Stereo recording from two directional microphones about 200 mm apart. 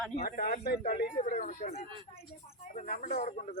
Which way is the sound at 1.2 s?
40° left (ahead or behind).